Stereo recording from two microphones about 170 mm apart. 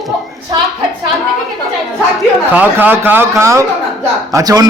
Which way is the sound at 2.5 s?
10° right (ahead or behind).